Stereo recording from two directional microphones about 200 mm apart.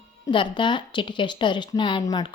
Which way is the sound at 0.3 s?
25° left (ahead or behind).